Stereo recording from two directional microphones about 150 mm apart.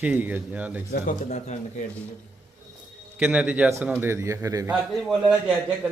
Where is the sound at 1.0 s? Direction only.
50° left (ahead or behind).